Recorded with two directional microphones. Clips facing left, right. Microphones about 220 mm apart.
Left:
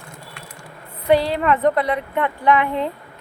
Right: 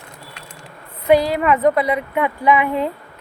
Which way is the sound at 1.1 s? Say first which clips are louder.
Right 2 dB; 10° right (ahead or behind).